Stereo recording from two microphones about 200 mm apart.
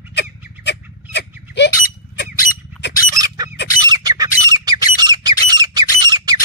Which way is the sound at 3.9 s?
20° right (ahead or behind).